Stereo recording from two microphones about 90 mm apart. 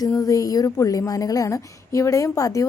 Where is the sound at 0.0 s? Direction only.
45° left (ahead or behind).